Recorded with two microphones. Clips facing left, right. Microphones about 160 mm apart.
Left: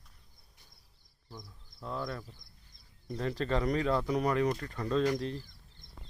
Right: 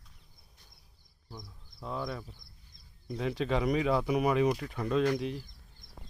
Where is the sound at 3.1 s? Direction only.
10° right (ahead or behind).